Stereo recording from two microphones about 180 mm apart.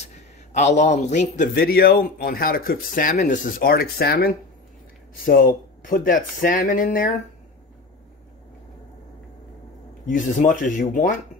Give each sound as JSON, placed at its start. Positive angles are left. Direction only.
{"t": 0.0, "sound": "a man's voice", "side_deg": 40}
{"t": 1.5, "sound": "speech", "side_deg": 55}
{"t": 10.0, "sound": "speech", "side_deg": 45}